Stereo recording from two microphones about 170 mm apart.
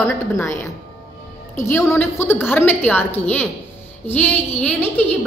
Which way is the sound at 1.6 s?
10° left (ahead or behind).